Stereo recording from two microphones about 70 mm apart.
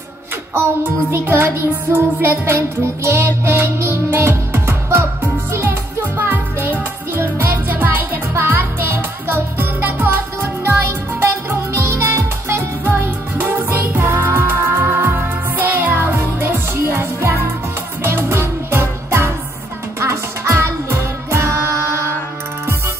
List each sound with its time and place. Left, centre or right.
0.6 s music: right
11.9 s music: right
12.9 s music: right